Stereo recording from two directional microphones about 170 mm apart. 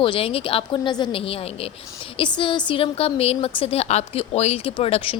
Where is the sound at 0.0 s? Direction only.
35° left (ahead or behind).